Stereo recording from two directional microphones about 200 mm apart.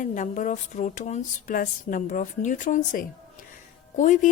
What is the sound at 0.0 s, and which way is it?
Speech, 40° left (ahead or behind).